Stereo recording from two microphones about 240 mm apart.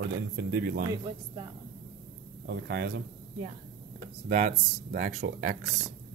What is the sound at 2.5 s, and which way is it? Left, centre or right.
Speech, right.